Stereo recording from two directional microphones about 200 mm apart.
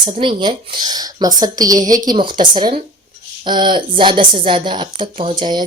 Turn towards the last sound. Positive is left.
turn(degrees=-20)  # may be behind; listen again after turning